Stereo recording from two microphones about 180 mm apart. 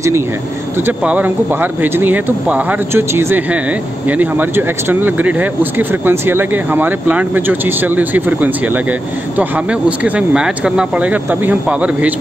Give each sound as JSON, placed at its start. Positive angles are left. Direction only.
{"t": 0.7, "sound": "speech", "side_deg": -10}